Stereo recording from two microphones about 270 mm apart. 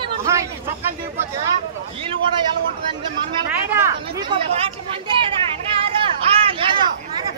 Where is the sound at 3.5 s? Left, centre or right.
Centre.